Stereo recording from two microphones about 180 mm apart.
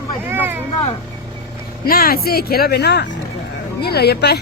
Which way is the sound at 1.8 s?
55° left (ahead or behind).